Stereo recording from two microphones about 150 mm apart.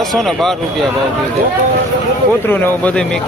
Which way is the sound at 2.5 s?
10° left (ahead or behind).